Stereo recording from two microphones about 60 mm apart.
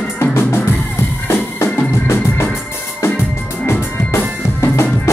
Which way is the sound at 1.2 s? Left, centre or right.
Left.